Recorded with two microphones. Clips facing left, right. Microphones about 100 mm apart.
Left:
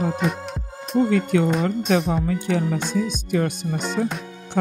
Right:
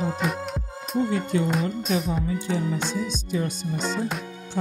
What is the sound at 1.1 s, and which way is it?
Speech, 70° left (ahead or behind).